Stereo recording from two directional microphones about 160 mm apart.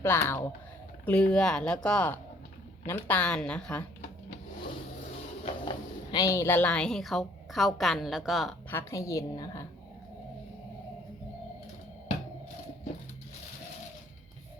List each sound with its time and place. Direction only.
0.0 s speech: 15° left (ahead or behind)
5.5 s speech: 30° left (ahead or behind); by 8.5 s centre (ahead or behind)
8.7 s a woman's voice: 15° left (ahead or behind)